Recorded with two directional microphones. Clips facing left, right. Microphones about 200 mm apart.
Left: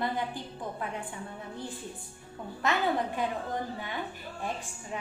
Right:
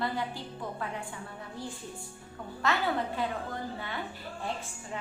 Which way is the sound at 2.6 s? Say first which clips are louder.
Left 1 dB; 15° left (ahead or behind).